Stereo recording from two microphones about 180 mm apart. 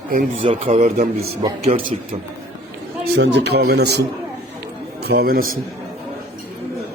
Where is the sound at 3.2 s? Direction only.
70° right (ahead or behind); by 5.5 s 55° right (ahead or behind).